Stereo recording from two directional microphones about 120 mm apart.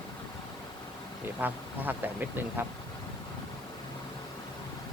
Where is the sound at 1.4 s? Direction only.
15° right (ahead or behind).